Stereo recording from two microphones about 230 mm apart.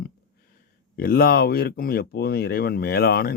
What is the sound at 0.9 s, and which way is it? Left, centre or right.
Speech, left.